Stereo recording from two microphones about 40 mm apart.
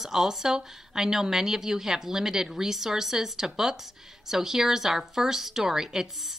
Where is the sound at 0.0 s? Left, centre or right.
Centre.